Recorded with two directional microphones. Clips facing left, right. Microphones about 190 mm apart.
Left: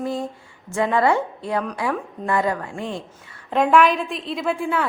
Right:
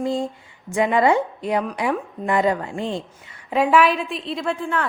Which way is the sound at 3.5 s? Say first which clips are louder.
Left 1 dB; 5° right (ahead or behind).